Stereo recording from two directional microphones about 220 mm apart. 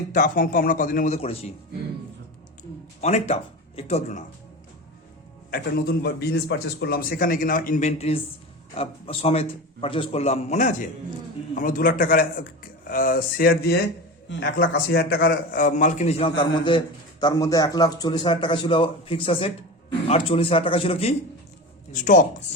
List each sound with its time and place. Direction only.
0.1 s a man's voice: 40° left (ahead or behind)
3.0 s speech: 30° left (ahead or behind)
5.5 s a man's voice: 45° left (ahead or behind)